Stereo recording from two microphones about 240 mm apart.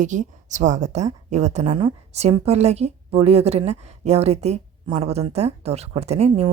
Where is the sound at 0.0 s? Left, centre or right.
Right.